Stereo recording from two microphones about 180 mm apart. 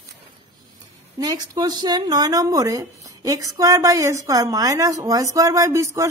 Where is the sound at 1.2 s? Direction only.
20° right (ahead or behind).